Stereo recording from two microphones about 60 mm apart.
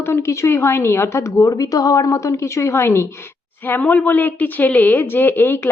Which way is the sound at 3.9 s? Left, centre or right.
Left.